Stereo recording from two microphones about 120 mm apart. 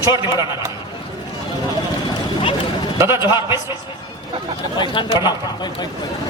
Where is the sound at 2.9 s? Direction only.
25° right (ahead or behind).